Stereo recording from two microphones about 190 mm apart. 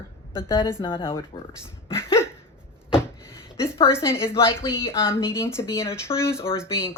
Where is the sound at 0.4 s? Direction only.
15° left (ahead or behind).